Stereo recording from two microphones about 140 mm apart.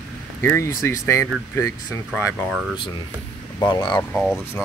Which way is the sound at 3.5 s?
30° left (ahead or behind).